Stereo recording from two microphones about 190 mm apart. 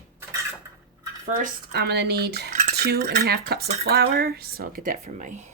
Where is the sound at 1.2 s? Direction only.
45° right (ahead or behind).